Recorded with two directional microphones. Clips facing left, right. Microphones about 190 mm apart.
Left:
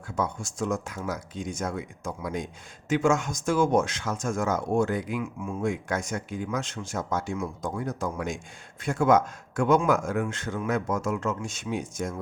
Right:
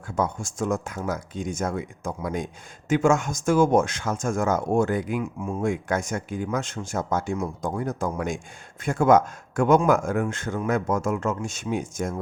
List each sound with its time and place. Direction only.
0.2 s speech: 50° right (ahead or behind)